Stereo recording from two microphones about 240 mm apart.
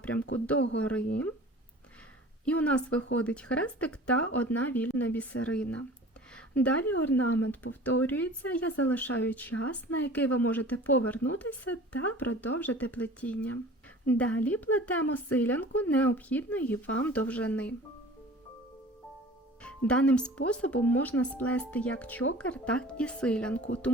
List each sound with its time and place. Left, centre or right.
0.0 s speech: centre
2.4 s speech: centre
7.4 s speech: left
7.9 s speech: centre
19.6 s speech: centre